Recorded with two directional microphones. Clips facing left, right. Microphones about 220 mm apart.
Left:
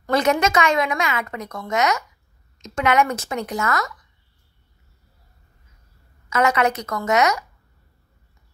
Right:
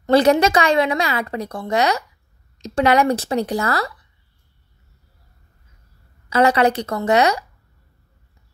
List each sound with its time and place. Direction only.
0.0 s a woman's voice: 30° right (ahead or behind)
6.3 s a woman's voice: 30° right (ahead or behind)